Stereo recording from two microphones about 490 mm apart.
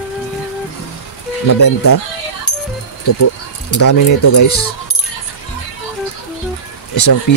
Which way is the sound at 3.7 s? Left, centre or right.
Left.